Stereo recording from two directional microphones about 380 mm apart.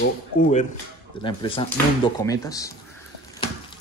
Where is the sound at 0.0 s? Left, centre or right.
Centre.